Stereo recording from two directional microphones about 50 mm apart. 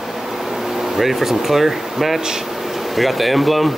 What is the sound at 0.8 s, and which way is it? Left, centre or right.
Speech, centre.